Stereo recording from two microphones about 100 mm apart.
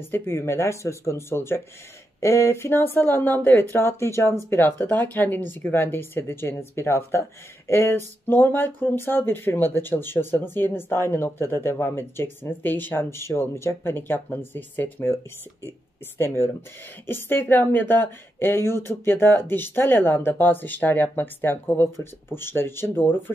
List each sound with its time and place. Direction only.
0.1 s speech: 25° left (ahead or behind)
17.0 s speech: 25° left (ahead or behind)